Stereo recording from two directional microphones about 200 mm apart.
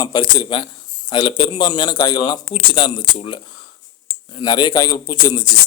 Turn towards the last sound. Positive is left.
turn(degrees=20)  # may be behind; listen again after turning